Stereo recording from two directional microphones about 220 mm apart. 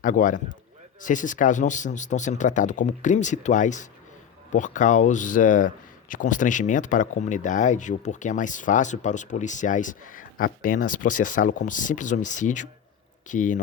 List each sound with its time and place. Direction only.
0.0 s speech: 35° left (ahead or behind)